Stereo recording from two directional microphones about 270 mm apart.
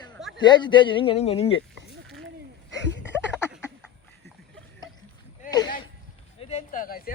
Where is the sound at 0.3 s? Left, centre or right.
Centre.